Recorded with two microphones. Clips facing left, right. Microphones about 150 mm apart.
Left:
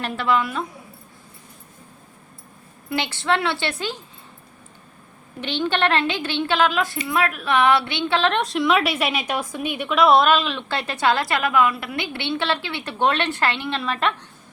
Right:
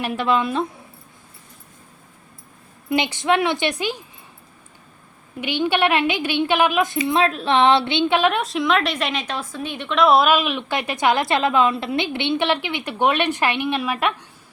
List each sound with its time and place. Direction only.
0.0 s a woman's voice: 15° right (ahead or behind)
2.9 s a woman's voice: 15° right (ahead or behind)
5.4 s a woman's voice: 10° right (ahead or behind)